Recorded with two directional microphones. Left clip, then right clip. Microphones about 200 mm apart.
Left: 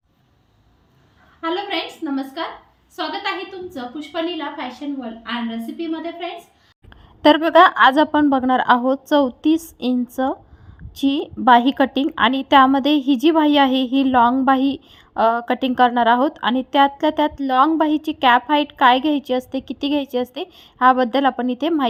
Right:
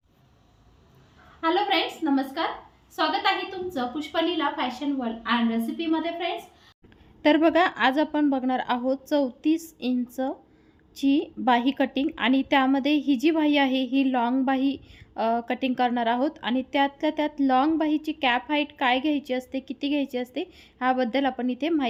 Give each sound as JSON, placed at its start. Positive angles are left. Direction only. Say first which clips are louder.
{"t": 1.4, "sound": "a woman's voice", "louder": "even", "side_deg": 0}
{"t": 7.2, "sound": "a woman's voice", "louder": "left 8 dB", "side_deg": 25}